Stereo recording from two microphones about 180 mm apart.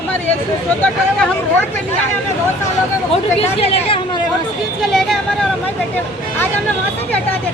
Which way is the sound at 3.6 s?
30° left (ahead or behind).